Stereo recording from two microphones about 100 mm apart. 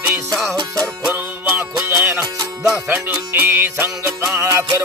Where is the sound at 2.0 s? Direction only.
25° right (ahead or behind).